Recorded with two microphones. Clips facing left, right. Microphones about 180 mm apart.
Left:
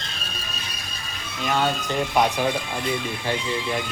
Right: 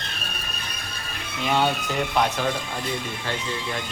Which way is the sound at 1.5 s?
10° right (ahead or behind).